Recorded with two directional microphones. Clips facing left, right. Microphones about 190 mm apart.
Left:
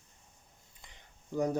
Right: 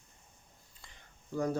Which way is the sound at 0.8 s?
20° left (ahead or behind).